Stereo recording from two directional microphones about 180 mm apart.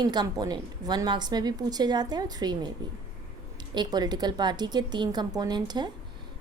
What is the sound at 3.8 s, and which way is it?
A woman's voice, 25° right (ahead or behind).